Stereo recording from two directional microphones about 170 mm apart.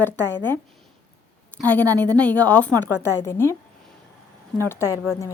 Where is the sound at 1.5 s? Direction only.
10° left (ahead or behind).